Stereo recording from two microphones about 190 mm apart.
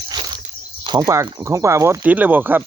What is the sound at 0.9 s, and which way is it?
Speech, 20° right (ahead or behind).